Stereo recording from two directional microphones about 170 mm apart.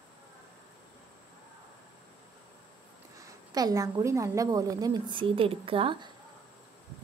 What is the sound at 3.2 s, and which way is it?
A woman's voice, 20° right (ahead or behind).